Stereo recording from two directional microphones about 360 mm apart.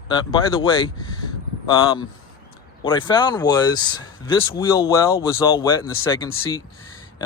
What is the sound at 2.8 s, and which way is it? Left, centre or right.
Speech, centre.